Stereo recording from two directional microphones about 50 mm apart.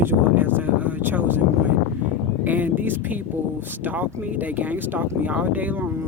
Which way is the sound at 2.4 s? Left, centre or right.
Right.